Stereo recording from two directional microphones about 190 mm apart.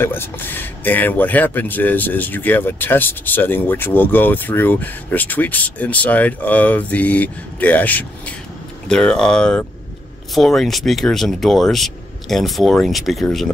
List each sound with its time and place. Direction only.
0.0 s speech: 10° left (ahead or behind)